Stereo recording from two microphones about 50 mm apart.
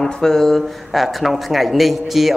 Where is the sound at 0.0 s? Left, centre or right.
Centre.